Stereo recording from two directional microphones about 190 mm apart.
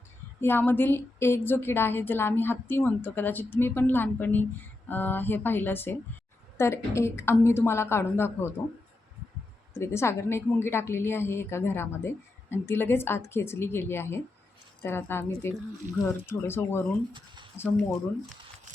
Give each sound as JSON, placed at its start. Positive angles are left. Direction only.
{"t": 0.4, "sound": "a woman's voice", "side_deg": 10}
{"t": 9.7, "sound": "a woman's voice", "side_deg": 15}
{"t": 17.1, "sound": "speech", "side_deg": -25}